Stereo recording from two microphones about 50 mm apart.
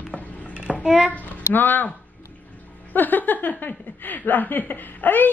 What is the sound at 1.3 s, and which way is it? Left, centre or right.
Speech, left.